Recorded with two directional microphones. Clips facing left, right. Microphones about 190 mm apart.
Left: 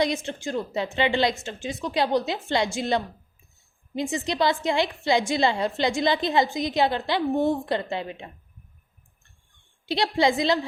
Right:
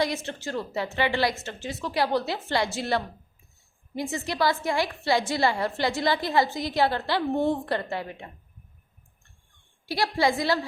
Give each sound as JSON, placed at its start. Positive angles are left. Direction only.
{"t": 0.0, "sound": "a woman's voice", "side_deg": 15}
{"t": 9.8, "sound": "a woman's voice", "side_deg": 20}